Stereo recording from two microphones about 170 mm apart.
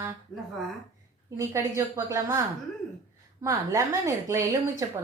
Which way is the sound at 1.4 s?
15° right (ahead or behind).